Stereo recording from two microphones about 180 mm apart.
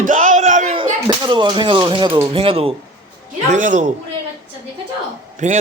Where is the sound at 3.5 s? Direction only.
45° right (ahead or behind).